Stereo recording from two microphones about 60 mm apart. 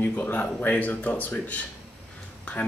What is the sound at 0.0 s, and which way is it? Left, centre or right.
Speech, left.